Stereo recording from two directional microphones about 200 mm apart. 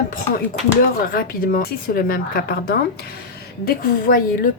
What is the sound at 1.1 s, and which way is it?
A woman's voice, 45° left (ahead or behind).